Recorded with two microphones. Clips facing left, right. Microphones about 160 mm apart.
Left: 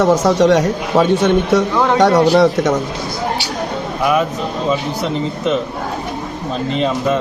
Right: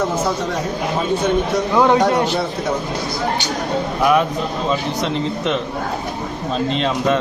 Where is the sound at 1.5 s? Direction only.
75° left (ahead or behind).